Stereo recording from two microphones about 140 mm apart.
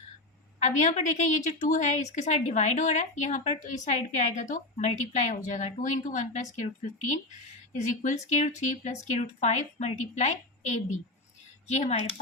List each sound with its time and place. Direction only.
0.6 s a woman's voice: 60° left (ahead or behind)
7.8 s a woman's voice: 60° left (ahead or behind)